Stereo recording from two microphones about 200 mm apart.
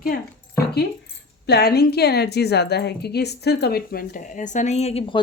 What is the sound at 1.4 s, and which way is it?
A woman's voice, 55° left (ahead or behind).